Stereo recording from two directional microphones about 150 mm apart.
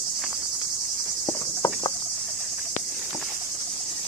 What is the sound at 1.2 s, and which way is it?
Insect, 25° left (ahead or behind).